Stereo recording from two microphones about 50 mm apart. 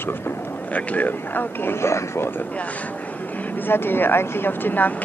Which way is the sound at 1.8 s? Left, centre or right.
Left.